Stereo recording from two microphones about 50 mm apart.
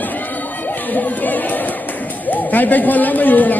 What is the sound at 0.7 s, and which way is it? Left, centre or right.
Chatter, left.